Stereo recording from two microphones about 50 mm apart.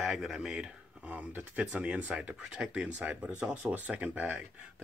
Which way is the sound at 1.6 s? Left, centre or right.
Right.